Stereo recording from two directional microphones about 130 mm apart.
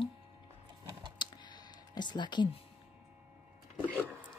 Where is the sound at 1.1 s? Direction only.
35° left (ahead or behind).